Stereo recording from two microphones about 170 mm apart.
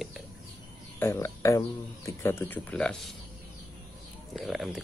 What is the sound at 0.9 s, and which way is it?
Speech, 15° left (ahead or behind).